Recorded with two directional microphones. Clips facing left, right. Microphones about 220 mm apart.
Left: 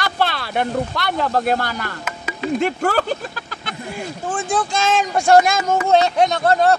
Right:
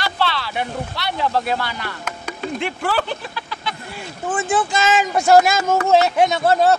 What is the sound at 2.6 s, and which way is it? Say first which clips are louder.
Speech: left 2 dB; 45° left (ahead or behind).